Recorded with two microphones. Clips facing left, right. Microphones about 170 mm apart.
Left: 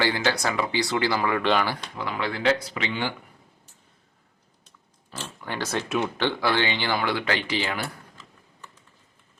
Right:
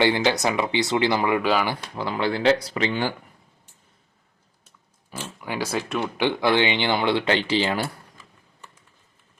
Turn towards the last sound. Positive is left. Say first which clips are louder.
# right 5 dB
turn(degrees=-30)  # may be behind; listen again after turning